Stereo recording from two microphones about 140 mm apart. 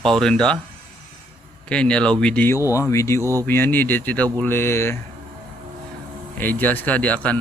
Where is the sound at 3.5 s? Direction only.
15° left (ahead or behind).